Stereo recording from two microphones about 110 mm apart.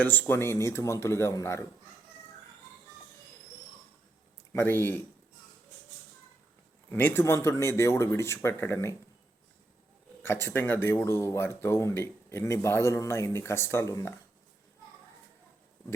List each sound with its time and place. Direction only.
0.0 s speech: 15° left (ahead or behind)
4.5 s speech: 20° left (ahead or behind)
6.9 s speech: 20° left (ahead or behind)
10.2 s speech: 20° left (ahead or behind)